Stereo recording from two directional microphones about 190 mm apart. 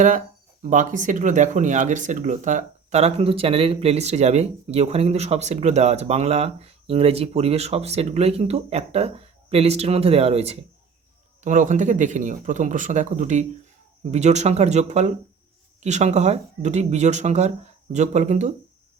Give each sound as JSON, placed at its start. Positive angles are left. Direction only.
{"t": 0.6, "sound": "speech", "side_deg": -40}